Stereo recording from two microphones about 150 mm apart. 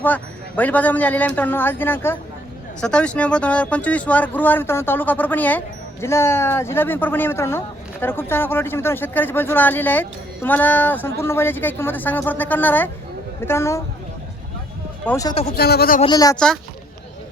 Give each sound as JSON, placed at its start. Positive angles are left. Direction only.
{"t": 0.0, "sound": "speech", "side_deg": 10}
{"t": 15.0, "sound": "speech", "side_deg": 20}
{"t": 15.5, "sound": "speech", "side_deg": 90}
{"t": 16.0, "sound": "speech", "side_deg": 25}
{"t": 16.3, "sound": "speech", "side_deg": 5}